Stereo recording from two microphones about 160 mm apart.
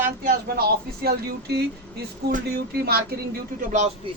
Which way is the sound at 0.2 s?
70° right (ahead or behind).